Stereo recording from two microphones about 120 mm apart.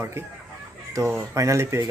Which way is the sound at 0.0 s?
20° right (ahead or behind).